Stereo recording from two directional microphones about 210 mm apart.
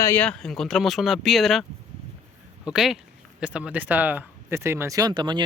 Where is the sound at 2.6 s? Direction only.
Centre (ahead or behind).